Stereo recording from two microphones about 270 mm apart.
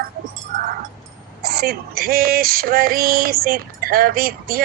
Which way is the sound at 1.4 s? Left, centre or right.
Right.